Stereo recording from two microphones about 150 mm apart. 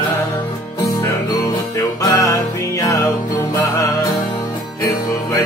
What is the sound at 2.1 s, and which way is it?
Music, 20° left (ahead or behind).